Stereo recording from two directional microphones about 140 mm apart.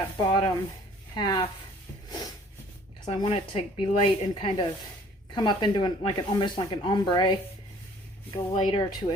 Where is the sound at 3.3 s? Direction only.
40° left (ahead or behind).